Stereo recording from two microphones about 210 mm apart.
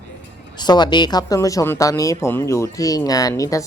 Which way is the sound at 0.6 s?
20° left (ahead or behind).